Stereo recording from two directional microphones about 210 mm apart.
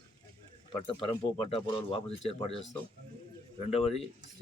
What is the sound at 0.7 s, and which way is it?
Speech, 25° left (ahead or behind).